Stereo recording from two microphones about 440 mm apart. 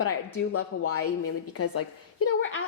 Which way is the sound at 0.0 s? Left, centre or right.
Left.